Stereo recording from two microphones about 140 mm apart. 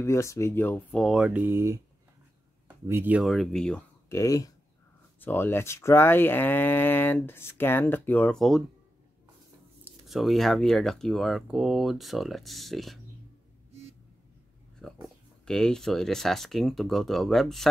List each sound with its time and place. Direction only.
0.0 s speech: 20° left (ahead or behind)
0.9 s speech: centre (ahead or behind); by 1.8 s 20° right (ahead or behind)
2.9 s speech: 10° right (ahead or behind); by 3.8 s 5° left (ahead or behind)
4.1 s speech: 25° left (ahead or behind); by 8.6 s centre (ahead or behind)
10.0 s speech: centre (ahead or behind)
13.7 s a sound: 50° right (ahead or behind)
14.8 s a sound: 5° left (ahead or behind)
15.4 s speech: 5° left (ahead or behind)